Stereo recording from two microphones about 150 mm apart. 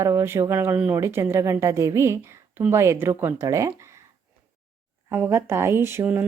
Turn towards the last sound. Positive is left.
turn(degrees=-15)  # may be behind; listen again after turning